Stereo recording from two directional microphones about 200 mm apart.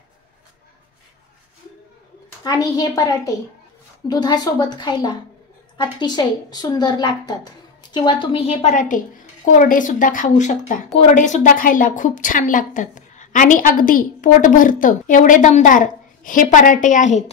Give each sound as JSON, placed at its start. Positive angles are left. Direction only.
{"t": 2.4, "sound": "a woman's voice", "side_deg": 20}